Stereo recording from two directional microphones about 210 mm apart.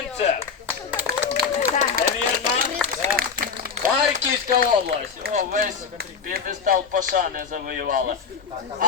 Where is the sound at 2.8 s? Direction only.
5° right (ahead or behind).